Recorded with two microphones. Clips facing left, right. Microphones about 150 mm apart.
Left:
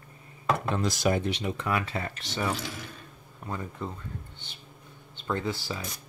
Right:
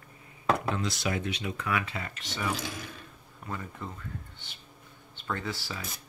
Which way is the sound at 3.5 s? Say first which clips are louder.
Left 3 dB; 20° left (ahead or behind).